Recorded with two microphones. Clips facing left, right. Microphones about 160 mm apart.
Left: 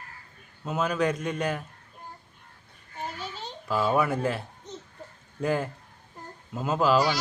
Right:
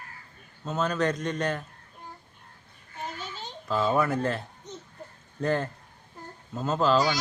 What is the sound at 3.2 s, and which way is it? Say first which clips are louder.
Babbling: left 1 dB; centre (ahead or behind).